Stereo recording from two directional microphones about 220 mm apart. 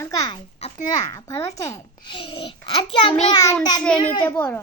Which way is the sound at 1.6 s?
15° left (ahead or behind).